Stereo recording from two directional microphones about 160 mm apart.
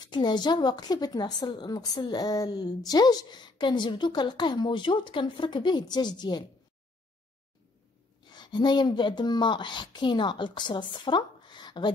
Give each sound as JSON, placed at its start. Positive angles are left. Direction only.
{"t": 0.0, "sound": "a woman's voice", "side_deg": 25}
{"t": 8.2, "sound": "speech", "side_deg": 25}